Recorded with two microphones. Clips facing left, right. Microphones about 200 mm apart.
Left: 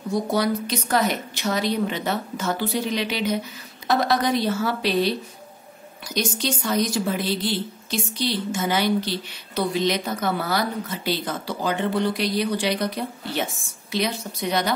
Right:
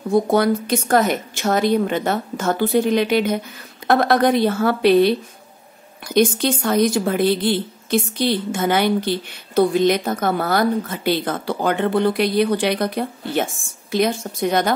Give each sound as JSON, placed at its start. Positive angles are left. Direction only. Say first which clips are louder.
{"t": 0.1, "sound": "a woman's voice", "louder": "right 6 dB", "side_deg": -55}